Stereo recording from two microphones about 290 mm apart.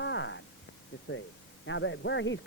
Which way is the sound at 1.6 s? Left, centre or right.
Left.